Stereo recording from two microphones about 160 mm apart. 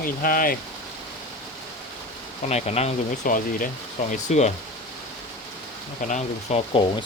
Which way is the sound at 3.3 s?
60° left (ahead or behind).